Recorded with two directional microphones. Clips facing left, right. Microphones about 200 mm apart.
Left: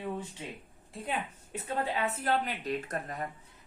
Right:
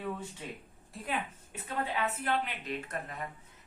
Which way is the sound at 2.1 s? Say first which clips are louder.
Left 2 dB; 40° left (ahead or behind).